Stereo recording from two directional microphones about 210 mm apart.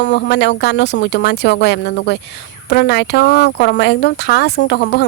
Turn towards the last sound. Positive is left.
turn(degrees=55)  # may be behind; listen again after turning